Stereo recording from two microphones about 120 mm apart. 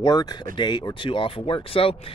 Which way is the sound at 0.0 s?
35° left (ahead or behind).